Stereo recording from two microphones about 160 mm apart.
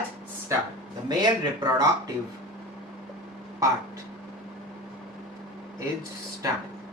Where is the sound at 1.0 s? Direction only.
25° right (ahead or behind).